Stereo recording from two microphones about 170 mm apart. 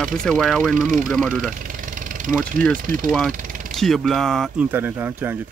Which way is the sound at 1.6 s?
50° right (ahead or behind).